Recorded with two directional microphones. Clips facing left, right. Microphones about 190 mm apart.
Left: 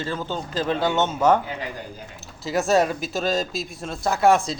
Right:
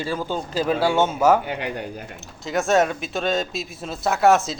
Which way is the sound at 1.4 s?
70° right (ahead or behind).